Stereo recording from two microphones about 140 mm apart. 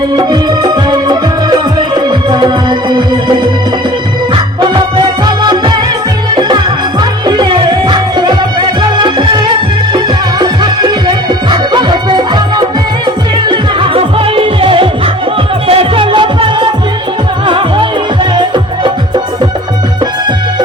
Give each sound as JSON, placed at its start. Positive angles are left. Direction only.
{"t": 0.2, "sound": "music", "side_deg": -30}
{"t": 4.6, "sound": "music", "side_deg": -35}
{"t": 7.3, "sound": "music", "side_deg": -30}
{"t": 10.4, "sound": "music", "side_deg": -30}